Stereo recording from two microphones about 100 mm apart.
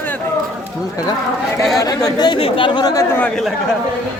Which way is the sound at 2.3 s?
65° left (ahead or behind).